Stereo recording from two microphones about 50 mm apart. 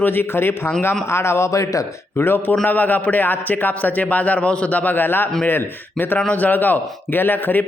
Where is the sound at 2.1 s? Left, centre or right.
Left.